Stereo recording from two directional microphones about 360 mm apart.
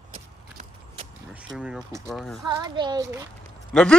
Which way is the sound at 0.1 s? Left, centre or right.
Centre.